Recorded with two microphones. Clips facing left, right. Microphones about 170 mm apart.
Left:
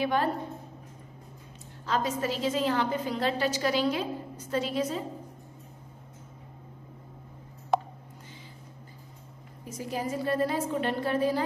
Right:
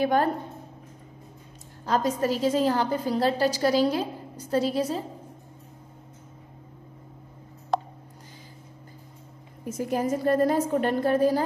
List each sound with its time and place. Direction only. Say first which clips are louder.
0.0 s a woman's voice: right 4 dB; 45° right (ahead or behind)
1.9 s a woman's voice: right 5 dB; 40° right (ahead or behind)
7.7 s a sound: even; 5° left (ahead or behind)
9.7 s a woman's voice: right 7 dB; 50° right (ahead or behind)